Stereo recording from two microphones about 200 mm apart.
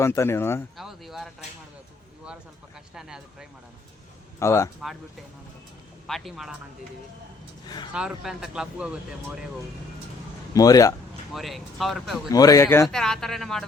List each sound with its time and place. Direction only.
0.0 s speech: 15° left (ahead or behind)
0.8 s speech: centre (ahead or behind)
2.9 s speech: centre (ahead or behind)
4.4 s speech: 15° left (ahead or behind)
6.1 s speech: centre (ahead or behind)
7.9 s speech: 5° right (ahead or behind)
10.5 s speech: 15° left (ahead or behind)
11.3 s speech: centre (ahead or behind)
12.3 s speech: 15° left (ahead or behind)
12.9 s speech: 5° left (ahead or behind)